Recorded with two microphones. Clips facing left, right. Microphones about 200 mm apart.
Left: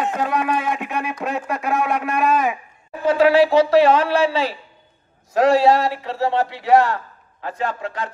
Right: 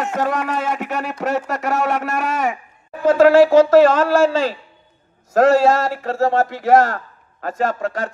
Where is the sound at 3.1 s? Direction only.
45° right (ahead or behind).